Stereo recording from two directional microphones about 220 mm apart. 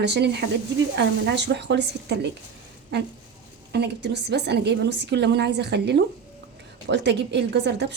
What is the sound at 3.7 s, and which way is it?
A woman's voice, 50° right (ahead or behind).